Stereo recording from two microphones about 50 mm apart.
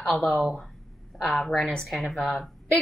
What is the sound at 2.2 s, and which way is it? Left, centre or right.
Speech, centre.